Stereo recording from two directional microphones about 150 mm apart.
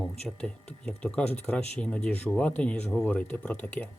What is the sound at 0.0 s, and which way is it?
Speech, 5° left (ahead or behind).